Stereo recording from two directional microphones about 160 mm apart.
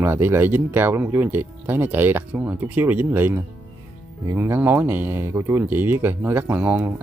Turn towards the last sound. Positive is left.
turn(degrees=-10)  # may be behind; listen again after turning